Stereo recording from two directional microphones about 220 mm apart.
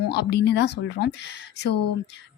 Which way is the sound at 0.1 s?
50° left (ahead or behind).